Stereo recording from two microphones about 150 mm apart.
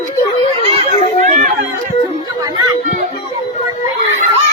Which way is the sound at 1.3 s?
50° right (ahead or behind).